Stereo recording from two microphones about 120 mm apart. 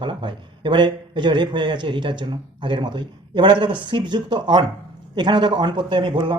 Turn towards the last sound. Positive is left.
turn(degrees=-40)  # may be behind; listen again after turning